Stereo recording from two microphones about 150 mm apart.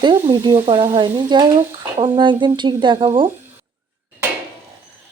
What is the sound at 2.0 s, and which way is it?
Speech, 30° right (ahead or behind).